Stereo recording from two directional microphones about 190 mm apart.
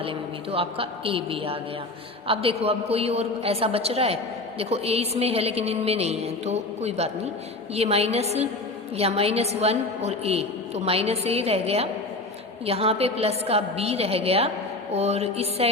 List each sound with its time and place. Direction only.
0.0 s a woman's voice: 30° right (ahead or behind)